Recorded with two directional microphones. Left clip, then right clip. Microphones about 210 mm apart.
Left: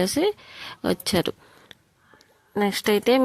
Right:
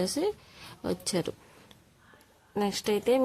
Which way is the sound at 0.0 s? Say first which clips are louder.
Left 7 dB; 30° left (ahead or behind).